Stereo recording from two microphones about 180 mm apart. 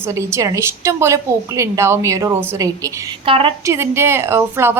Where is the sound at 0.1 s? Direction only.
15° right (ahead or behind).